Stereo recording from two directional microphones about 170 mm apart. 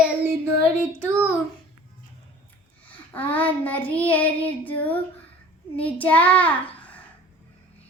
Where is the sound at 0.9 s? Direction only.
15° right (ahead or behind).